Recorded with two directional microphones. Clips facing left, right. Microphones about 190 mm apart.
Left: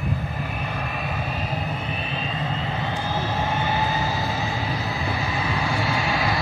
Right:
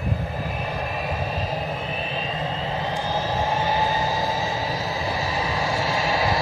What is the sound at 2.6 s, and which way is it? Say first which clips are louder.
Vehicle: right 1 dB; 35° right (ahead or behind).